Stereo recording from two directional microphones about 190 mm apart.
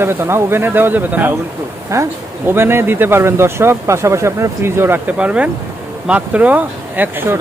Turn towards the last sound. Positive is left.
turn(degrees=-10)  # may be behind; listen again after turning